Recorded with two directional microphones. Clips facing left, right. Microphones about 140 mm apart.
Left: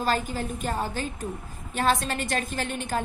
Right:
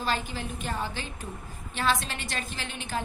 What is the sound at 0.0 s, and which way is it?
A woman's voice, 45° left (ahead or behind).